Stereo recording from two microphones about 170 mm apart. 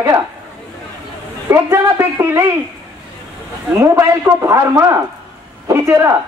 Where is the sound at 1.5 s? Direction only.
15° right (ahead or behind).